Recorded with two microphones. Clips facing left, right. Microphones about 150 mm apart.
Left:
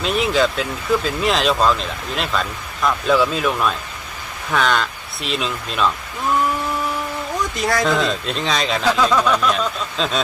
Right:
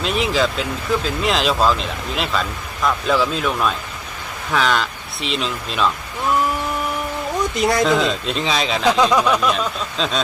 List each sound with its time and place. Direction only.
0.0 s speech: centre (ahead or behind)
7.5 s speech: 20° right (ahead or behind)
7.9 s speech: centre (ahead or behind)
8.8 s speech: 15° right (ahead or behind); by 10.2 s centre (ahead or behind)